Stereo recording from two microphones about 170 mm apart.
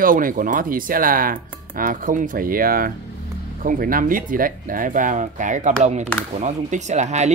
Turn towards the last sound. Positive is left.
turn(degrees=-40)  # may be behind; listen again after turning